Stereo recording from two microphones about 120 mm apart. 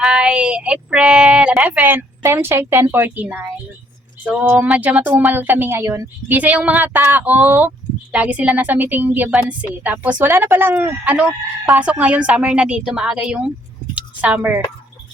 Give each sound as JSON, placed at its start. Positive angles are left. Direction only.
{"t": 0.0, "sound": "a woman's voice", "side_deg": -5}
{"t": 6.3, "sound": "a woman's voice", "side_deg": -10}
{"t": 13.9, "sound": "a sound", "side_deg": -10}